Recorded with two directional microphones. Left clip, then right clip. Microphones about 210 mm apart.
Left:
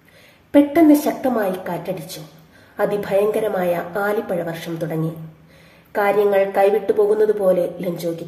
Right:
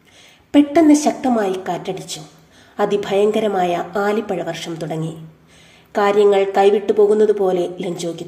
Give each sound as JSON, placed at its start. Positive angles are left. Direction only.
{"t": 0.5, "sound": "a woman's voice", "side_deg": -30}
{"t": 5.9, "sound": "a woman's voice", "side_deg": -35}